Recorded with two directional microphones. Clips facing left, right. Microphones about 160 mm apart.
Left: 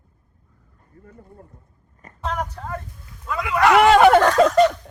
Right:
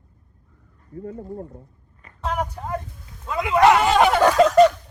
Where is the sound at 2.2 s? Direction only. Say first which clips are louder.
Right 1 dB; 10° right (ahead or behind).